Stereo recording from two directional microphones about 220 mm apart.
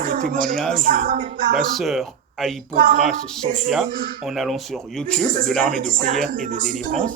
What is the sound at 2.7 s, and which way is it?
Speech, 40° right (ahead or behind).